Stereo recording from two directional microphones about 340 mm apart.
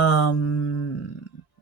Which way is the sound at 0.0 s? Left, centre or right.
Left.